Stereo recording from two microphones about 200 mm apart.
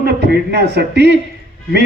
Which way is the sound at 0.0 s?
55° right (ahead or behind).